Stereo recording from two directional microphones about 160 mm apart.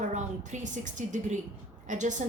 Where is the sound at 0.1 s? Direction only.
50° right (ahead or behind).